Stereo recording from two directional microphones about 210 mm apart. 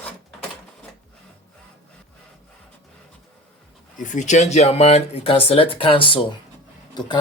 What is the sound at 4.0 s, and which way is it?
Speech, 35° left (ahead or behind).